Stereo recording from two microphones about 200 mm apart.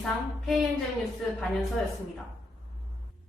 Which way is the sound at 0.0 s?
Centre (ahead or behind).